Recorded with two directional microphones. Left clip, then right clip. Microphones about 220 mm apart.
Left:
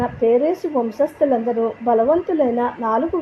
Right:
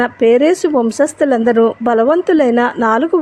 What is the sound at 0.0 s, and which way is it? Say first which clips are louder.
Speech: right 6 dB; 30° right (ahead or behind).